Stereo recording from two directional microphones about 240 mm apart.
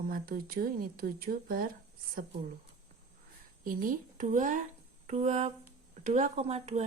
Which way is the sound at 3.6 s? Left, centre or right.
Right.